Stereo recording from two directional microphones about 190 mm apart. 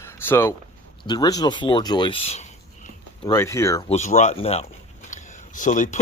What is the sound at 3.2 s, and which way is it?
Speech, 15° left (ahead or behind).